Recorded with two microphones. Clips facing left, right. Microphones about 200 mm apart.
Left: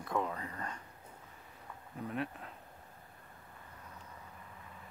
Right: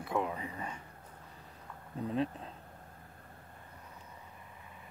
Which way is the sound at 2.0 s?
25° right (ahead or behind).